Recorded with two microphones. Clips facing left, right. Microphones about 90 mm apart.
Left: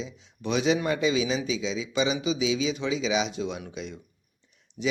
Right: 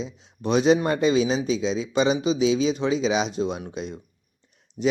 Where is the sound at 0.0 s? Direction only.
40° right (ahead or behind).